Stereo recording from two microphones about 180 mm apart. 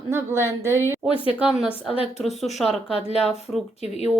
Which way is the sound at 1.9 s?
30° left (ahead or behind).